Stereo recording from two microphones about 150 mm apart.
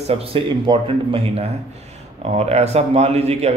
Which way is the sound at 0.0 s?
40° right (ahead or behind).